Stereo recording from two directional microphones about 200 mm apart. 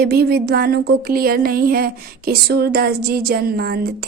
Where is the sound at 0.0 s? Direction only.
50° right (ahead or behind).